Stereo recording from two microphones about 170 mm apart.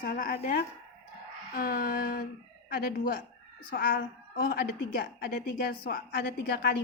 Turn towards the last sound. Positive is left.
turn(degrees=70)  # may be behind; listen again after turning